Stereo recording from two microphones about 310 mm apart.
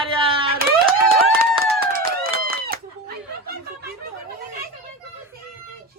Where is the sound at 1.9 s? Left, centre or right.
Right.